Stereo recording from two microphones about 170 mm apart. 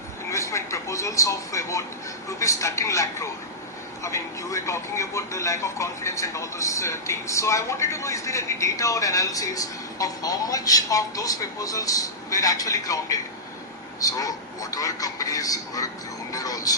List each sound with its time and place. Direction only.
0.3 s a man's voice: 15° left (ahead or behind)
16.3 s vehicle: 20° left (ahead or behind)